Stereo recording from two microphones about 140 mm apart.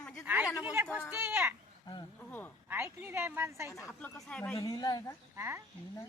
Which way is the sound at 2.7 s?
15° right (ahead or behind).